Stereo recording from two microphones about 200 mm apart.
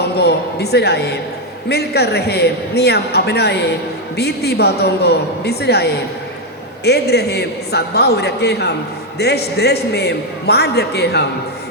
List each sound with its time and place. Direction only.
0.0 s a man's voice: 55° left (ahead or behind)